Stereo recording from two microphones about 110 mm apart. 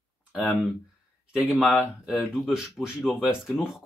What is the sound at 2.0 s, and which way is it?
Speech, centre (ahead or behind).